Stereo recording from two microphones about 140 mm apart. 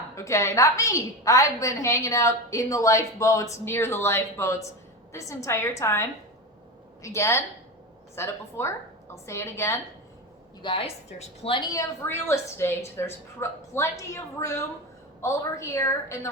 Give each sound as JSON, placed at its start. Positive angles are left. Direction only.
{"t": 0.2, "sound": "a woman's voice", "side_deg": 20}
{"t": 10.6, "sound": "a woman's voice", "side_deg": 40}
{"t": 11.6, "sound": "a woman's voice", "side_deg": 20}